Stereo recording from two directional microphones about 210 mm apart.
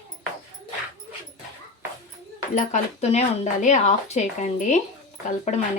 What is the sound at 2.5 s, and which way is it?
Speech, 35° left (ahead or behind).